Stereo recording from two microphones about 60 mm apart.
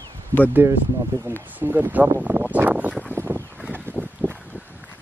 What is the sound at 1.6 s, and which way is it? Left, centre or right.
Speech, right.